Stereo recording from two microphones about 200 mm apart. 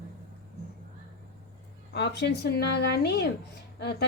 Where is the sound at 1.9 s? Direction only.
60° left (ahead or behind).